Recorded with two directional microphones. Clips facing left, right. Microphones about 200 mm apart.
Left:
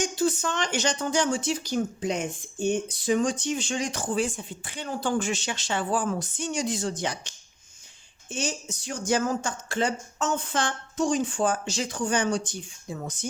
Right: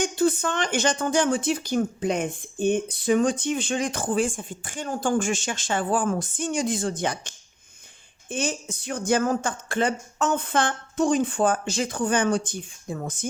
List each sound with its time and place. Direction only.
0.0 s speech: 55° right (ahead or behind)